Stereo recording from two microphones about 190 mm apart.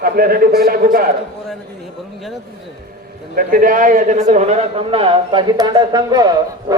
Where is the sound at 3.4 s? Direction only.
45° right (ahead or behind).